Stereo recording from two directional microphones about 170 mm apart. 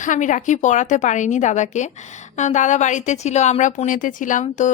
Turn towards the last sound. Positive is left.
turn(degrees=45)  # may be behind; listen again after turning